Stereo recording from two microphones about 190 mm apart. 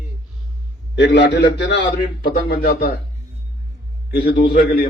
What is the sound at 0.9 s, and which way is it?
A man's voice, 70° left (ahead or behind).